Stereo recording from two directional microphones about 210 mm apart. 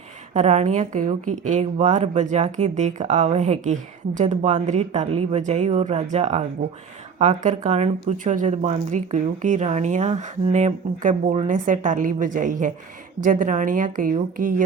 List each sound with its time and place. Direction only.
0.3 s speech: 35° right (ahead or behind)